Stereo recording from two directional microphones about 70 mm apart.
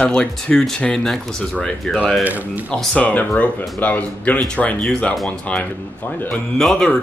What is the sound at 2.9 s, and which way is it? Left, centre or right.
Speech, centre.